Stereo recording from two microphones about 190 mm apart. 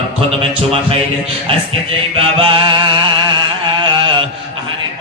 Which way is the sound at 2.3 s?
30° right (ahead or behind).